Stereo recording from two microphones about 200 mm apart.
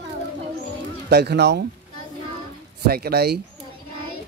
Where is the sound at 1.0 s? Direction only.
55° right (ahead or behind).